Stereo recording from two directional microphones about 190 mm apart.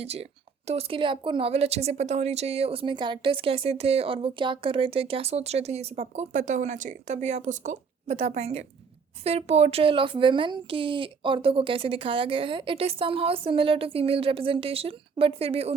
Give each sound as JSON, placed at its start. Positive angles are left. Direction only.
{"t": 0.0, "sound": "speech", "side_deg": -30}